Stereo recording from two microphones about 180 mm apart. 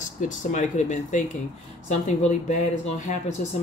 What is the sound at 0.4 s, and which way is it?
Speech, 40° left (ahead or behind).